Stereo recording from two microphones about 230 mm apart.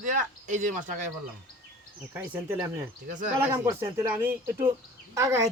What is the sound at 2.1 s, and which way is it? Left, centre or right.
Speech, centre.